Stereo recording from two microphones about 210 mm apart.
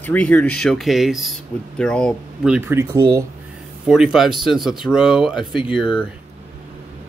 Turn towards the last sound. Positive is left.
turn(degrees=-5)  # may be behind; listen again after turning